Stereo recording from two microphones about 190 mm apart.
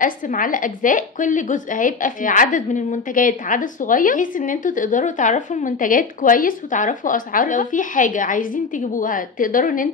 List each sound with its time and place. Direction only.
0.0 s a woman's voice: 45° left (ahead or behind)